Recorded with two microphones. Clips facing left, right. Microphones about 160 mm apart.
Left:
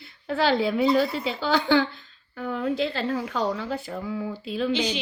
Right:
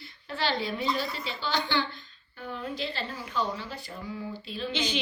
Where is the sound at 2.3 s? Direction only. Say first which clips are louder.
Left 9 dB; 90° left.